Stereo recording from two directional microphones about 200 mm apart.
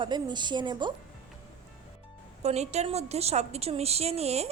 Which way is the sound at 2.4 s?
35° right (ahead or behind).